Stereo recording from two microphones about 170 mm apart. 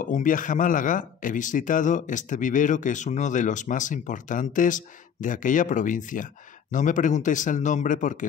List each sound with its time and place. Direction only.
0.0 s speech: 50° left (ahead or behind)